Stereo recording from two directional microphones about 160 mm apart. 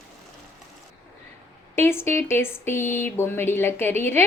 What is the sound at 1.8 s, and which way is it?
Speech, 15° left (ahead or behind).